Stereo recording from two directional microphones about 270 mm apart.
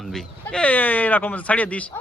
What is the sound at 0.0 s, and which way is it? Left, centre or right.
Speech, centre.